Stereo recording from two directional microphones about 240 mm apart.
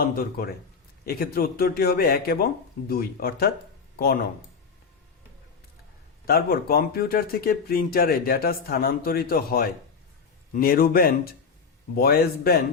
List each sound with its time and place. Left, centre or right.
0.0 s speech: left
6.2 s speech: left